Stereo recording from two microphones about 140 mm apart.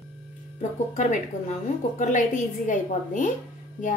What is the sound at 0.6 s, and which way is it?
A woman's voice, 60° left (ahead or behind).